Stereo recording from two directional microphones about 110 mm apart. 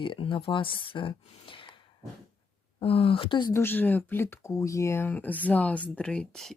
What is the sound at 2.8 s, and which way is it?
Speech, 60° left (ahead or behind).